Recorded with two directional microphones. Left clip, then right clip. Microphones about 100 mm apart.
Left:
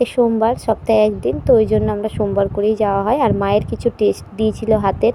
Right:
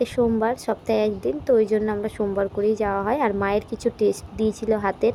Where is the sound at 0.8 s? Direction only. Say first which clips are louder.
Left 8 dB; 85° left.